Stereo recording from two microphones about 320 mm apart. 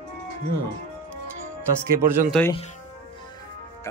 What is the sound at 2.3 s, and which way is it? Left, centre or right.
Speech, centre.